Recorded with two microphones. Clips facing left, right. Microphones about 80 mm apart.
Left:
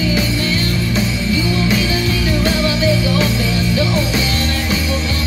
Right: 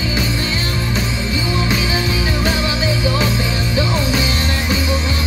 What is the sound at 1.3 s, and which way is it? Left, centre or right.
Music, right.